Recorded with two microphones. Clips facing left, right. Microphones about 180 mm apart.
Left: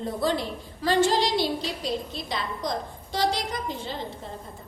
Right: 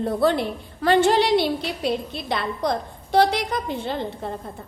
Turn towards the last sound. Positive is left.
turn(degrees=-60)  # may be behind; listen again after turning